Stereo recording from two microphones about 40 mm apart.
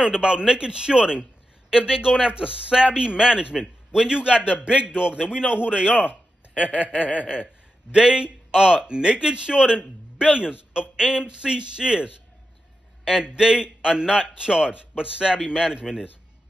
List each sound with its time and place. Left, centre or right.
0.0 s a man's voice: right
6.5 s speech: left
7.9 s a man's voice: right